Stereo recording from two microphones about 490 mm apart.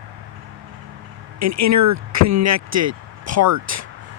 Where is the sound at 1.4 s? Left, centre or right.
Right.